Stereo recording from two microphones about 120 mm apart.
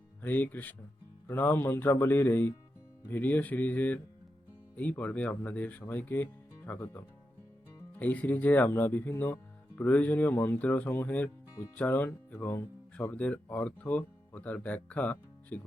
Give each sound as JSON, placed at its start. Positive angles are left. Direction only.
{"t": 0.2, "sound": "speech", "side_deg": 15}